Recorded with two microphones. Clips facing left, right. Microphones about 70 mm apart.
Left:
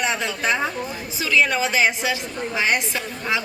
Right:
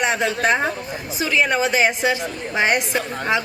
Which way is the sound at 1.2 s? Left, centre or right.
Right.